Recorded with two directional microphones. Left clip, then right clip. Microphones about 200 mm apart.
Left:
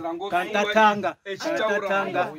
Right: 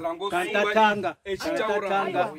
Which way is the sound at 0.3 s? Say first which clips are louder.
Left 1 dB; 50° left (ahead or behind).